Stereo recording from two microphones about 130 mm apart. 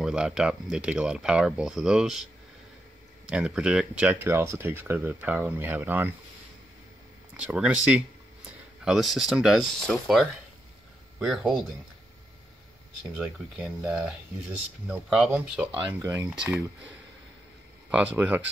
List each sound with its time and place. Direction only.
0.0 s speech: 5° right (ahead or behind)
3.3 s speech: 5° right (ahead or behind)
7.3 s speech: 10° right (ahead or behind)
13.1 s speech: centre (ahead or behind)
16.0 s speech: 25° right (ahead or behind)
16.3 s speech: 10° right (ahead or behind)
17.9 s speech: 10° right (ahead or behind)